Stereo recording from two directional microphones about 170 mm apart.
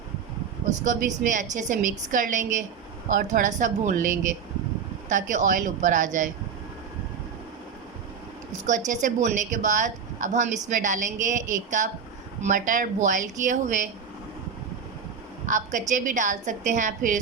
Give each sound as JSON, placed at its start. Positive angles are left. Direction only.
{"t": 0.7, "sound": "a woman's voice", "side_deg": -50}
{"t": 8.6, "sound": "a woman's voice", "side_deg": -45}
{"t": 15.4, "sound": "a woman's voice", "side_deg": -50}